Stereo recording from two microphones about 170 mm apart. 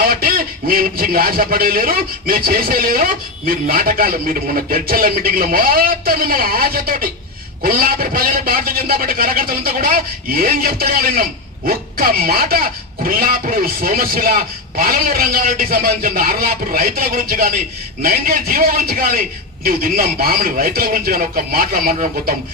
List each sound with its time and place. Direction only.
0.0 s a man's voice: 60° right (ahead or behind)